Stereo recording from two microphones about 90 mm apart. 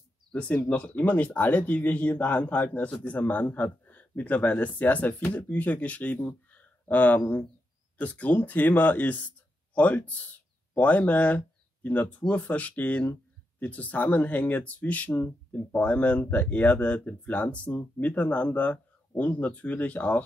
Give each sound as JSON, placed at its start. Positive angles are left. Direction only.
{"t": 0.3, "sound": "speech", "side_deg": 15}